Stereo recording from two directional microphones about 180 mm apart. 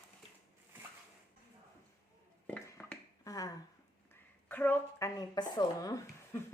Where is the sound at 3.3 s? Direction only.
20° left (ahead or behind).